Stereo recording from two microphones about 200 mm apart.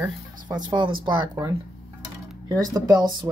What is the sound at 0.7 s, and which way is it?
Speech, 25° right (ahead or behind).